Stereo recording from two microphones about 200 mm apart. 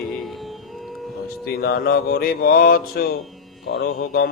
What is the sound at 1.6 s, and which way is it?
Speech, 50° left (ahead or behind).